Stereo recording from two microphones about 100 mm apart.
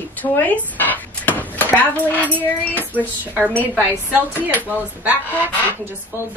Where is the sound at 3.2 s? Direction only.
15° right (ahead or behind).